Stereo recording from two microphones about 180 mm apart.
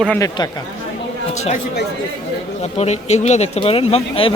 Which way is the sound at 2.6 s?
35° left (ahead or behind).